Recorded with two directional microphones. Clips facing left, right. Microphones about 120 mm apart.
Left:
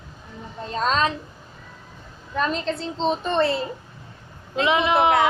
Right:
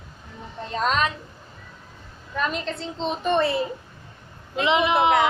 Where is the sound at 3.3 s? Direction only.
15° right (ahead or behind).